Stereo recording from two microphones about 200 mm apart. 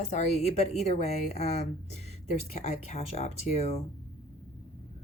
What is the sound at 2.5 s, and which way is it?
Speech, 30° left (ahead or behind).